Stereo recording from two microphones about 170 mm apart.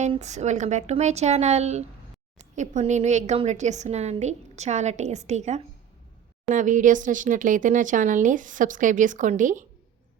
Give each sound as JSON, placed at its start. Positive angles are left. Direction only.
{"t": 0.1, "sound": "a woman's voice", "side_deg": -40}